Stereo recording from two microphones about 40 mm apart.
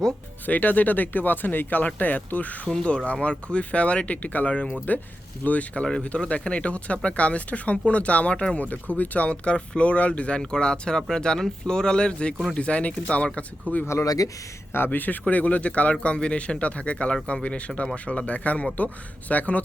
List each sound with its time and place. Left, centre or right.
0.4 s speech: left
2.6 s speech: left
5.8 s speech: left
8.6 s speech: left
13.7 s speech: left
14.8 s speech: left